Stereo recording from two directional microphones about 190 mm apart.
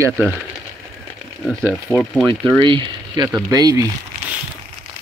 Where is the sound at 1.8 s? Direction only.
Centre (ahead or behind).